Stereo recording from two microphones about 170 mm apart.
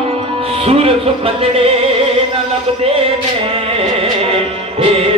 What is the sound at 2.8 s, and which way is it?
Music, 35° right (ahead or behind).